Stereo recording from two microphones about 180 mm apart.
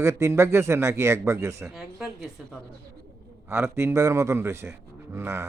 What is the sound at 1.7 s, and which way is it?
Speech, 5° right (ahead or behind).